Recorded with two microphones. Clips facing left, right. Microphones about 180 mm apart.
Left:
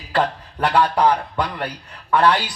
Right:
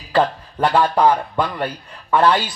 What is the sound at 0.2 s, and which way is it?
Speech, 25° right (ahead or behind).